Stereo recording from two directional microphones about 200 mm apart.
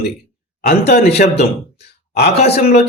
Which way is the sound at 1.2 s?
40° left (ahead or behind).